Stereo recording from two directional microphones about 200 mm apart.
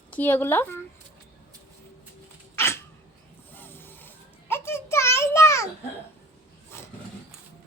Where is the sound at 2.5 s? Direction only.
15° left (ahead or behind).